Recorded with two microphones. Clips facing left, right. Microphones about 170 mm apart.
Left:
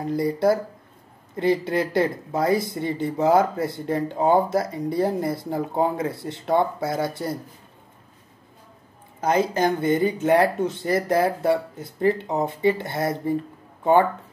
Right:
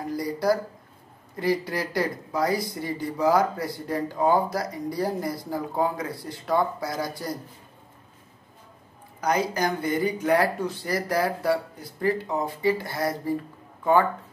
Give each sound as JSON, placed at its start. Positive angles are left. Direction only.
{"t": 0.0, "sound": "speech", "side_deg": 25}
{"t": 9.2, "sound": "speech", "side_deg": 25}